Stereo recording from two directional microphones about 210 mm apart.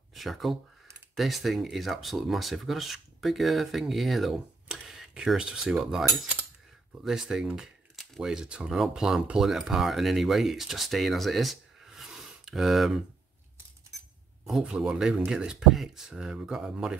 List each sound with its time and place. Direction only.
0.1 s speech: centre (ahead or behind)
14.4 s speech: 5° right (ahead or behind)